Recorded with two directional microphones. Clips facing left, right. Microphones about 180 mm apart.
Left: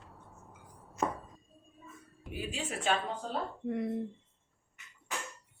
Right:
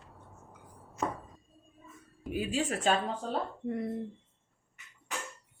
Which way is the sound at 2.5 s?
40° right (ahead or behind).